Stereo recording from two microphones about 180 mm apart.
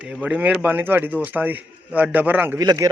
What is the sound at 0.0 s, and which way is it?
A man's voice, 5° right (ahead or behind).